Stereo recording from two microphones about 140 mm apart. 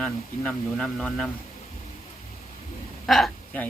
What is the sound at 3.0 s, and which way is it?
Speech, centre (ahead or behind).